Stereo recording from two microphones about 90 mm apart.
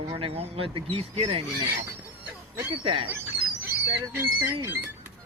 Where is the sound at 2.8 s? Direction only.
90° right.